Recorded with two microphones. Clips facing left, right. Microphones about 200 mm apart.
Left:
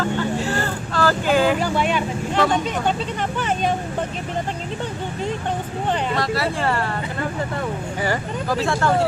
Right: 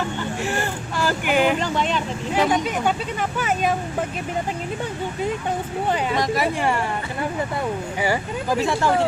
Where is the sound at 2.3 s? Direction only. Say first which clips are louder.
Even; 10° right (ahead or behind).